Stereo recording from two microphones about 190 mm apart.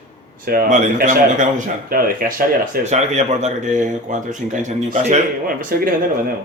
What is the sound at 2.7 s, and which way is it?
Speech, 35° right (ahead or behind).